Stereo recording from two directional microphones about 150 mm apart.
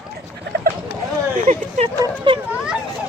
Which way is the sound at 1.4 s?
50° right (ahead or behind).